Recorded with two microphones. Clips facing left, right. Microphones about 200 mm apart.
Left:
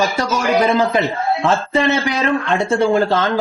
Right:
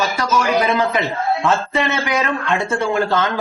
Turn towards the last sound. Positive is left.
turn(degrees=35)  # may be behind; listen again after turning